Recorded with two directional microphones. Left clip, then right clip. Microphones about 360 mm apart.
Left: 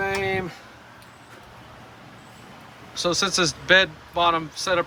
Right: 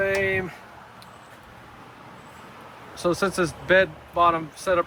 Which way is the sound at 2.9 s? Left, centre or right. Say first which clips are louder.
Left 1 dB; centre.